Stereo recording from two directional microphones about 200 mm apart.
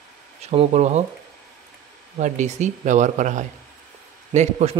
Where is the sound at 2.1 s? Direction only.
35° right (ahead or behind).